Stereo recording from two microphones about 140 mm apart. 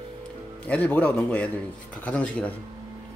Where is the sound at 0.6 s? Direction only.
10° left (ahead or behind).